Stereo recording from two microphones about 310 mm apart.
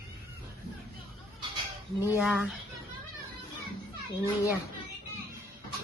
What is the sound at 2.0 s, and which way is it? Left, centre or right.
Speech, centre.